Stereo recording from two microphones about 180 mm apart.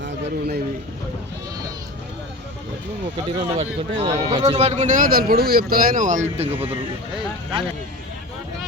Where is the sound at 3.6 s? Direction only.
30° right (ahead or behind).